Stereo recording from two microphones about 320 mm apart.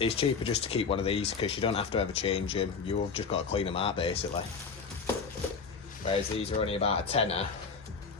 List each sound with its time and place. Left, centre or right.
0.0 s speech: centre
6.1 s speech: centre